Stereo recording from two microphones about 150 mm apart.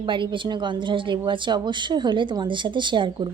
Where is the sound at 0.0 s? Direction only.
30° right (ahead or behind).